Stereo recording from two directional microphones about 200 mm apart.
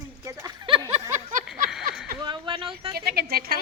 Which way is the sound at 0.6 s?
25° right (ahead or behind).